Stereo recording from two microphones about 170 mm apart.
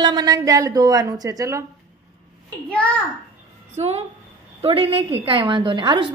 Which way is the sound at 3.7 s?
40° right (ahead or behind).